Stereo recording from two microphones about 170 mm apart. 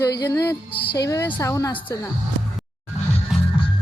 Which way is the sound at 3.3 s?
Centre (ahead or behind).